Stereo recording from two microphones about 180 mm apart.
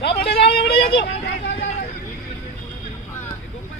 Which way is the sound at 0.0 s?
65° left (ahead or behind).